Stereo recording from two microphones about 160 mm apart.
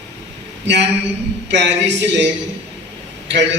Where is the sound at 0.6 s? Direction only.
90° right.